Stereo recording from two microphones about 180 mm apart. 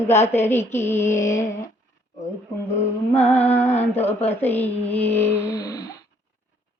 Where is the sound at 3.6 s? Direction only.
10° left (ahead or behind).